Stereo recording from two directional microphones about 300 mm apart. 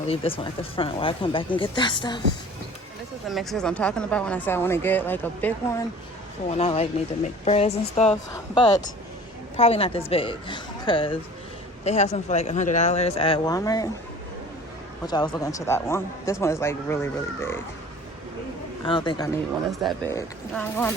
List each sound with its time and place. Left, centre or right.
0.8 s speech: centre
3.2 s speech: centre
6.5 s speech: centre
15.0 s speech: centre
18.9 s speech: centre
19.8 s speech: centre